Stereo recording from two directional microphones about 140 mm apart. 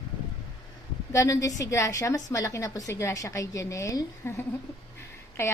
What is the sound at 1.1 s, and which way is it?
A woman's voice, 20° left (ahead or behind).